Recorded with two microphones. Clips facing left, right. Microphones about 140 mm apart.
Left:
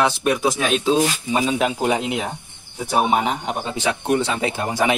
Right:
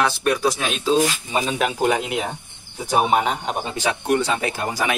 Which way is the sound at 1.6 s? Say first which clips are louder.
Even; 15° left (ahead or behind).